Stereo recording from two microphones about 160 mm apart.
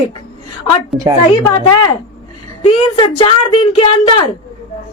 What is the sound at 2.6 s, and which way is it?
Speech, 35° left (ahead or behind).